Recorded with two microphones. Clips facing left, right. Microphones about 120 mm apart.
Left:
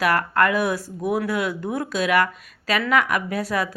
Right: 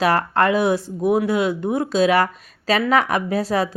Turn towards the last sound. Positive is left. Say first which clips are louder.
# right 4 dB
turn(degrees=-30)  # may be behind; listen again after turning